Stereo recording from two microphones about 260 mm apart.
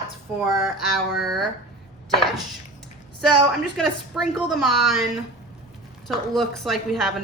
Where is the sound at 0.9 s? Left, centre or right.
Centre.